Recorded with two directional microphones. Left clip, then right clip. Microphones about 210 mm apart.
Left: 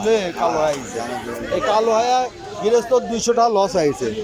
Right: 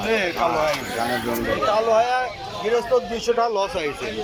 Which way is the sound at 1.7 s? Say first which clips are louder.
Left 3 dB; 20° left (ahead or behind).